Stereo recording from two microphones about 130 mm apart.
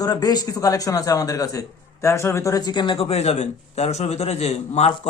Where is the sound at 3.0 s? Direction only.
55° left (ahead or behind).